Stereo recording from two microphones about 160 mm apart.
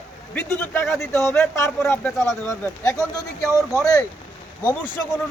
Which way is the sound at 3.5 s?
15° right (ahead or behind).